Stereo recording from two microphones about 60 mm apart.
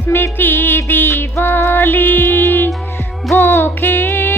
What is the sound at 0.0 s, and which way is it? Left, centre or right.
Music, left.